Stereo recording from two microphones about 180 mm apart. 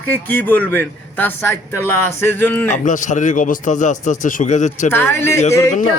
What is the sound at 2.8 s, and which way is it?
Speech, 45° left (ahead or behind).